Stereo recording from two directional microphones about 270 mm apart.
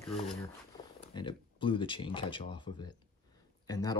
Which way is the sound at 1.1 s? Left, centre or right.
Centre.